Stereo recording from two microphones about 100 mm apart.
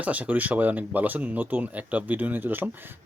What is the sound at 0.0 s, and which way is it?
Speech, 15° right (ahead or behind).